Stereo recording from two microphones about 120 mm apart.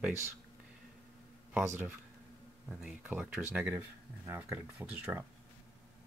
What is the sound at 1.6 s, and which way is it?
Speech, 15° right (ahead or behind).